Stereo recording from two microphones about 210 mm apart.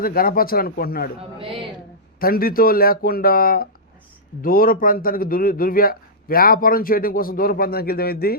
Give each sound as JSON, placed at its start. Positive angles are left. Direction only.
{"t": 0.0, "sound": "a man's voice", "side_deg": 45}
{"t": 2.1, "sound": "a man's voice", "side_deg": 45}